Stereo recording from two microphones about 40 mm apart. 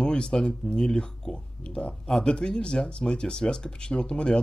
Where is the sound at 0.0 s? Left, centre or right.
Left.